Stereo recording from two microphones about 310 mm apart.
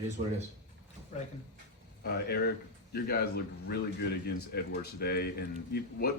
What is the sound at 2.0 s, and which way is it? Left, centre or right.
A man's voice, left.